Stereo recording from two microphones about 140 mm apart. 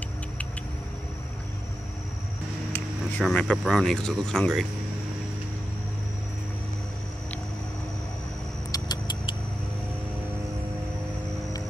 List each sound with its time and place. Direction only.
2.7 s a sound: 10° left (ahead or behind)
3.4 s speech: centre (ahead or behind)
8.7 s vehicle: 30° left (ahead or behind)